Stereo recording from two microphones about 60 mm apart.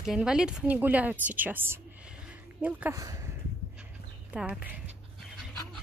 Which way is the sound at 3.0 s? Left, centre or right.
Right.